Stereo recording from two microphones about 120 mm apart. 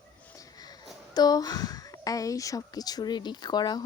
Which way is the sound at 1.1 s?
35° left (ahead or behind).